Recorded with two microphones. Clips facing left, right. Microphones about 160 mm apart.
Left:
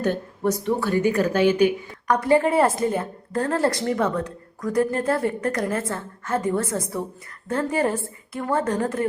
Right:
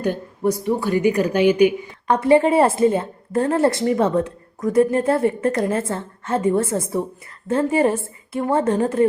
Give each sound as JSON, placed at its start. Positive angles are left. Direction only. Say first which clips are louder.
{"t": 0.0, "sound": "a woman's voice", "louder": "right 2 dB", "side_deg": -10}
{"t": 2.0, "sound": "a woman's voice", "louder": "right 4 dB", "side_deg": -25}